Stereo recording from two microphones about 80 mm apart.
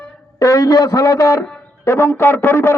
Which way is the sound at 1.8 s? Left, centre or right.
Left.